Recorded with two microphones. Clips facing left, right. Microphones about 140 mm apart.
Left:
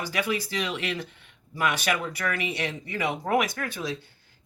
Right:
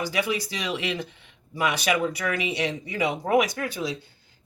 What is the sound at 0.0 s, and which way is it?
Speech, 15° right (ahead or behind).